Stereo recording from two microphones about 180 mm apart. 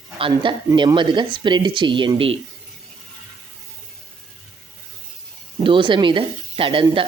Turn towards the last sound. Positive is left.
turn(degrees=-30)  # may be behind; listen again after turning